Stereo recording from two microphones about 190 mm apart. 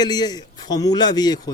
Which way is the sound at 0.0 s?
20° left (ahead or behind).